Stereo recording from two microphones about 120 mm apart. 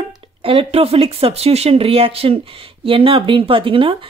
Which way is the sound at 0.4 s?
50° right (ahead or behind).